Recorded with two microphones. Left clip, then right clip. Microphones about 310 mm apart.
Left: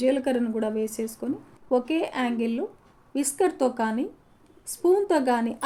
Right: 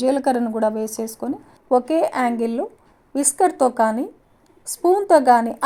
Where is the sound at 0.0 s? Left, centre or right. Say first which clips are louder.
Right 5 dB; right.